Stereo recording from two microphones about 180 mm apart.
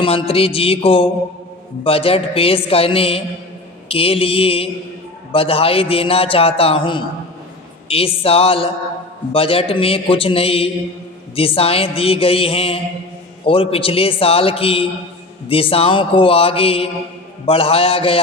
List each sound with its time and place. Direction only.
0.0 s a man's voice: 30° left (ahead or behind)